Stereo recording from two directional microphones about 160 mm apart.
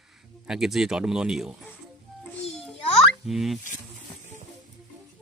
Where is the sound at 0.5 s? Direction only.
5° right (ahead or behind).